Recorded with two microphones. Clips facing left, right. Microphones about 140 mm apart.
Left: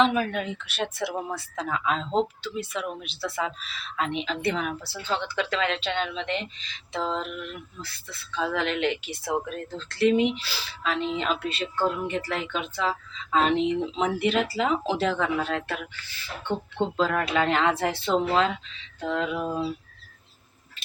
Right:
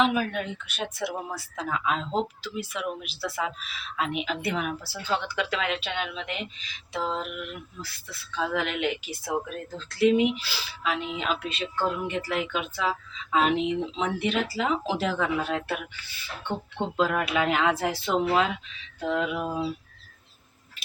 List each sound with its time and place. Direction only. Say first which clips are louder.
0.0 s speech: left 2 dB; 5° right (ahead or behind)
19.0 s mantra: even; 10° right (ahead or behind)